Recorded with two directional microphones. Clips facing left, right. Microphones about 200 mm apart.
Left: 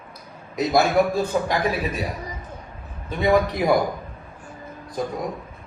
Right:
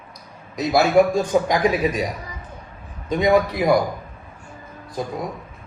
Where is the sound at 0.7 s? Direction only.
15° right (ahead or behind).